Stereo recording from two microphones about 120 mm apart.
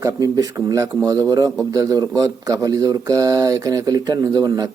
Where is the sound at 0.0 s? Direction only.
30° right (ahead or behind).